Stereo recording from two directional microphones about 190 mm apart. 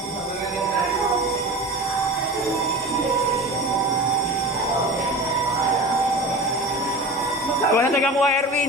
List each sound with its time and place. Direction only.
7.8 s speech: 10° left (ahead or behind)